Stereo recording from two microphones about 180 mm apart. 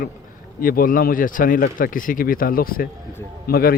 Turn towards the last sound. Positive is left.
turn(degrees=55)  # may be behind; listen again after turning